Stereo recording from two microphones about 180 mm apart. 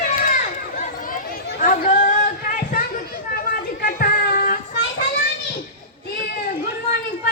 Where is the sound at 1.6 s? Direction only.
50° left (ahead or behind).